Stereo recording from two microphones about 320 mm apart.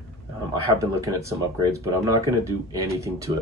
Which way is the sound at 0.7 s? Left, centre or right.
Centre.